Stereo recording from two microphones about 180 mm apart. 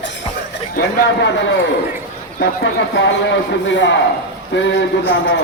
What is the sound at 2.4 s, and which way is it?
A man's voice, 80° left.